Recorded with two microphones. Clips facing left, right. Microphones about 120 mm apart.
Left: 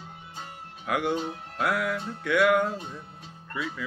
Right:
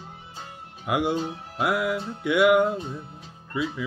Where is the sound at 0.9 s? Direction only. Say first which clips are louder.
Right 3 dB; 15° right (ahead or behind).